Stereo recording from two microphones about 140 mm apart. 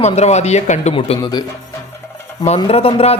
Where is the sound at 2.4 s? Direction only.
45° left (ahead or behind).